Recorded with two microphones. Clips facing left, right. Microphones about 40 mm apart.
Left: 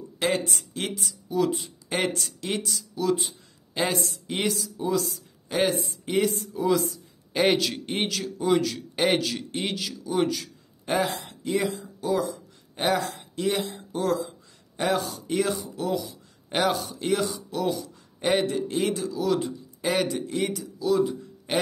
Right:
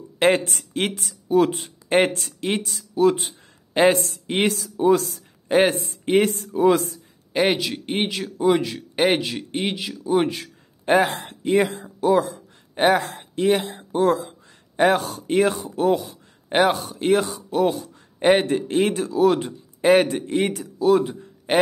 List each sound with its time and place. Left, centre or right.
0.2 s speech: right
7.3 s speech: centre; by 21.5 s right